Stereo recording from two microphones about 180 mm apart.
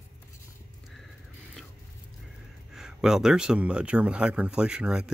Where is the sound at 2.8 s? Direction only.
5° right (ahead or behind).